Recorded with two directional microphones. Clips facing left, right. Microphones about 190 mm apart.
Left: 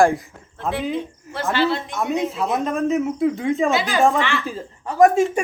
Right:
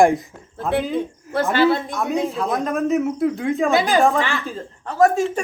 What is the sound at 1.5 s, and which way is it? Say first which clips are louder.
Speech: right 3 dB; 50° right (ahead or behind).